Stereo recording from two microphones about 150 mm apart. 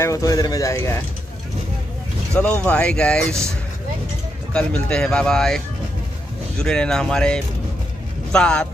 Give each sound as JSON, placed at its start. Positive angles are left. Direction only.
{"t": 0.0, "sound": "speech", "side_deg": 20}
{"t": 2.3, "sound": "speech", "side_deg": 10}
{"t": 4.6, "sound": "speech", "side_deg": 5}
{"t": 6.6, "sound": "speech", "side_deg": 5}